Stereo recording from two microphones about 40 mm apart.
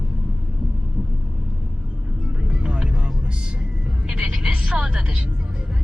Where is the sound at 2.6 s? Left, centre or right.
Right.